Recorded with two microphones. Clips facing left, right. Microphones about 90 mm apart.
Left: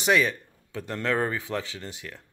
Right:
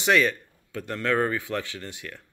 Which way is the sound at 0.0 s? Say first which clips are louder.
Right 1 dB; 20° left (ahead or behind).